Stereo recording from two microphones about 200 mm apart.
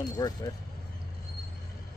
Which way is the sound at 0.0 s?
20° left (ahead or behind).